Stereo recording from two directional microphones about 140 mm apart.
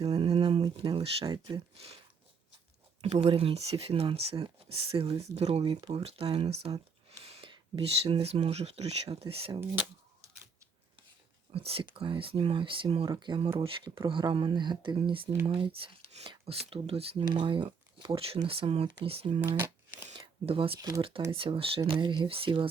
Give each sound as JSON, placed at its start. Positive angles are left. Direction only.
{"t": 0.0, "sound": "speech", "side_deg": -45}
{"t": 3.0, "sound": "speech", "side_deg": -45}
{"t": 5.7, "sound": "speech", "side_deg": -30}
{"t": 6.0, "sound": "speech", "side_deg": -45}
{"t": 7.3, "sound": "a sound", "side_deg": -45}
{"t": 7.5, "sound": "speech", "side_deg": -45}
{"t": 11.5, "sound": "speech", "side_deg": -45}
{"t": 19.5, "sound": "speech", "side_deg": -15}
{"t": 20.1, "sound": "speech", "side_deg": -40}
{"t": 20.7, "sound": "speech", "side_deg": -25}
{"t": 21.2, "sound": "speech", "side_deg": -40}